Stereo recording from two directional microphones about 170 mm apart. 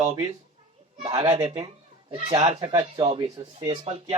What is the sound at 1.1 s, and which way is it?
Speech, 20° right (ahead or behind).